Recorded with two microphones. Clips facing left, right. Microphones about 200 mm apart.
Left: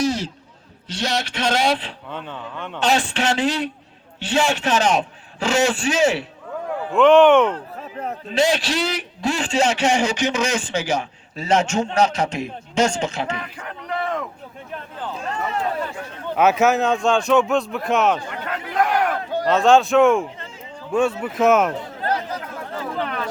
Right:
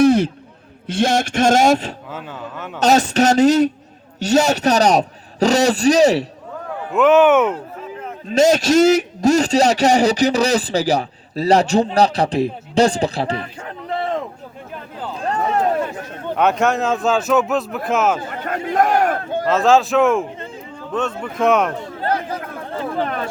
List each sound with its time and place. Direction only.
0.0 s a sound: 55° right (ahead or behind)
0.9 s a man's voice: 50° right (ahead or behind)
2.0 s speech: 5° right (ahead or behind)
2.8 s a man's voice: 40° right (ahead or behind)
6.9 s speech: 5° right (ahead or behind)
8.3 s a man's voice: 45° right (ahead or behind)
15.3 s a sound: 40° right (ahead or behind)
16.3 s speech: 5° left (ahead or behind)
18.3 s battle cry: 45° right (ahead or behind)
19.5 s speech: centre (ahead or behind)
22.1 s chatter: 55° right (ahead or behind)